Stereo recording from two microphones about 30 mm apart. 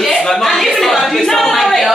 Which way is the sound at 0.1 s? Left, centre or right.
Left.